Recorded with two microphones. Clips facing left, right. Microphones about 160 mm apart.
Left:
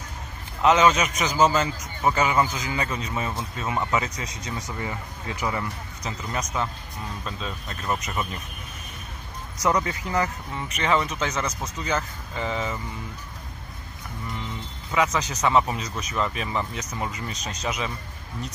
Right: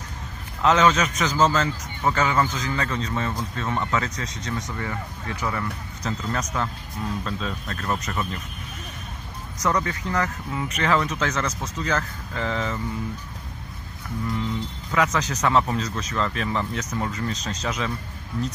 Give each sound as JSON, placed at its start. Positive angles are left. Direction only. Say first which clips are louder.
{"t": 0.6, "sound": "a man's voice", "louder": "even", "side_deg": 5}
{"t": 6.0, "sound": "a man's voice", "louder": "right 3 dB", "side_deg": 5}
{"t": 9.6, "sound": "a man's voice", "louder": "left 1 dB", "side_deg": 15}
{"t": 10.5, "sound": "speech", "louder": "right 2 dB", "side_deg": 0}
{"t": 14.9, "sound": "a man's voice", "louder": "even", "side_deg": 10}